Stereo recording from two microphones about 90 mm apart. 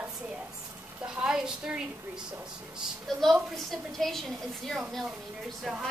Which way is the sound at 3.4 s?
Centre (ahead or behind).